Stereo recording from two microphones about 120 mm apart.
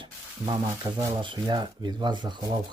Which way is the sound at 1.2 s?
40° right (ahead or behind).